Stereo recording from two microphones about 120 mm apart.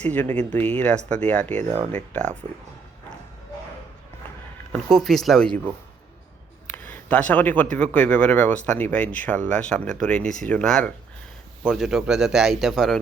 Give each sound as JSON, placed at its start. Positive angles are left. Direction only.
{"t": 0.1, "sound": "speech", "side_deg": 15}
{"t": 1.6, "sound": "speech", "side_deg": -50}
{"t": 4.9, "sound": "a man's voice", "side_deg": 0}
{"t": 6.8, "sound": "a man's voice", "side_deg": 15}